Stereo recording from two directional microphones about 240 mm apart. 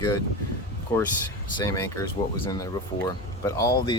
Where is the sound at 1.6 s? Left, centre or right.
Centre.